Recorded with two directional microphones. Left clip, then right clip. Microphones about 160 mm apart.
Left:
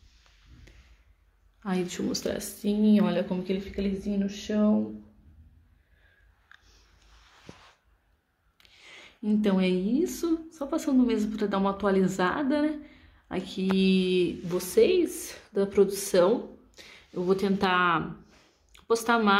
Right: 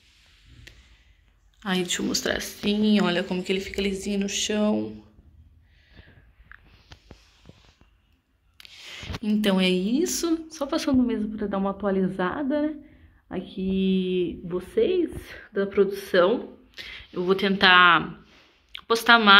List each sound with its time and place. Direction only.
0.7 s a sound: centre (ahead or behind)
1.6 s a woman's voice: 5° left (ahead or behind)
8.5 s a woman's voice: centre (ahead or behind)